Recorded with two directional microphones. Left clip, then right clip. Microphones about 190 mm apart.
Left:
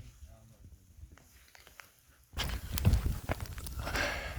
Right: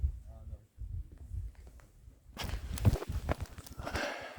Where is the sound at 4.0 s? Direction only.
20° right (ahead or behind).